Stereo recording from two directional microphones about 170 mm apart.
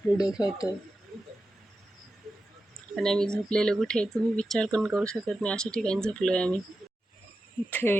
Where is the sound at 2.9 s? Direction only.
5° left (ahead or behind).